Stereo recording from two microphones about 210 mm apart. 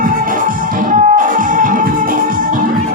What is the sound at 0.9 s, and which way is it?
Music, 40° right (ahead or behind).